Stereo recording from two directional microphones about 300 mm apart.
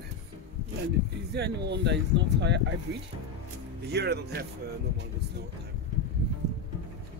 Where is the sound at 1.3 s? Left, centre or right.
Right.